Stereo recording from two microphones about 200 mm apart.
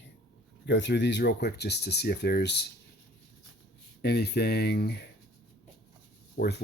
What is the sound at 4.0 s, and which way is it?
Speech, 55° left (ahead or behind).